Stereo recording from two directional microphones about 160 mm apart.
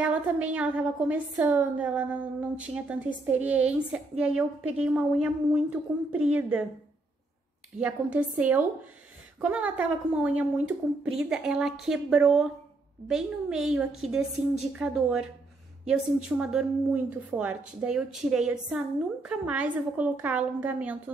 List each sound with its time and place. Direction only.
0.0 s a woman's voice: 10° right (ahead or behind)
7.8 s a woman's voice: 10° right (ahead or behind)